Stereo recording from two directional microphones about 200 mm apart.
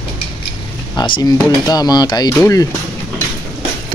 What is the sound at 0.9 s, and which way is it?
Speech, 20° left (ahead or behind).